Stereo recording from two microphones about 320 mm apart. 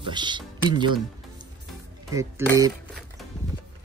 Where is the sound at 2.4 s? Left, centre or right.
Centre.